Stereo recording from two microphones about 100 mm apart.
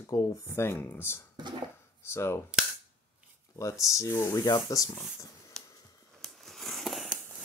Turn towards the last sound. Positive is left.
turn(degrees=0)  # may be behind; listen again after turning